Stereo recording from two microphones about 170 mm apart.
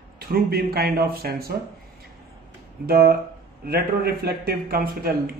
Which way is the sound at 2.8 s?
60° right (ahead or behind).